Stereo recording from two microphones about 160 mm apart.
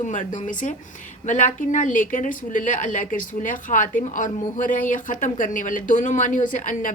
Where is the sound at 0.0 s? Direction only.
50° left (ahead or behind).